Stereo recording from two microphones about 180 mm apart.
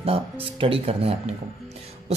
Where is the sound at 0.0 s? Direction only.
30° right (ahead or behind).